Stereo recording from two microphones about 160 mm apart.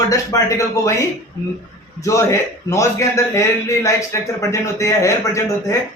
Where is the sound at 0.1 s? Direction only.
20° left (ahead or behind).